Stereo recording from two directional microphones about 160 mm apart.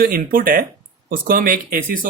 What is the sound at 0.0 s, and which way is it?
Speech, 65° right (ahead or behind).